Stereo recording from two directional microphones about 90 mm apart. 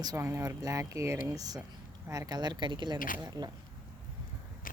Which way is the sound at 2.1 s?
45° right (ahead or behind).